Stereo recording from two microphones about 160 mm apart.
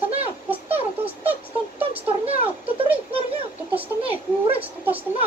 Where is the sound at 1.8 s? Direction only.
35° right (ahead or behind).